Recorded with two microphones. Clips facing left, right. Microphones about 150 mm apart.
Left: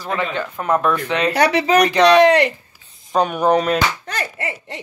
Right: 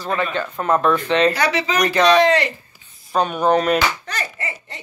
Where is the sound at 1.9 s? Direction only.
15° left (ahead or behind).